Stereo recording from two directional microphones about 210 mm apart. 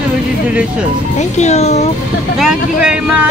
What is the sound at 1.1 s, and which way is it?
Speech, 35° left (ahead or behind).